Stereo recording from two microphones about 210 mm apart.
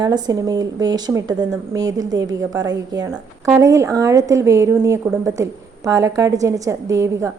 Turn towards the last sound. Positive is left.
turn(degrees=-15)  # may be behind; listen again after turning